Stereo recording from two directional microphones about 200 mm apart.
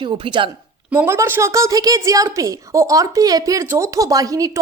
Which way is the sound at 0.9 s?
10° right (ahead or behind).